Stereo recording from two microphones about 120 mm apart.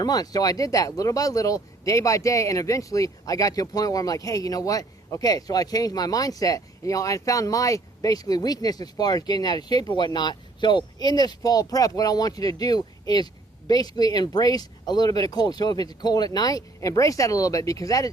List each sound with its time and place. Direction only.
0.0 s speech: 30° left (ahead or behind)